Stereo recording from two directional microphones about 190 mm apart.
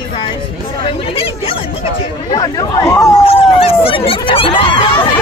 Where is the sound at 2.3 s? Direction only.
20° left (ahead or behind).